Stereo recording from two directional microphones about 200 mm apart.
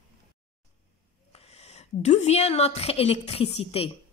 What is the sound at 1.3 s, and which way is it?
A woman's voice, 30° left (ahead or behind).